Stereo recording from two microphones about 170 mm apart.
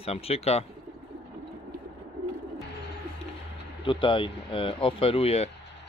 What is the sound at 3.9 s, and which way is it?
Speech, 30° left (ahead or behind).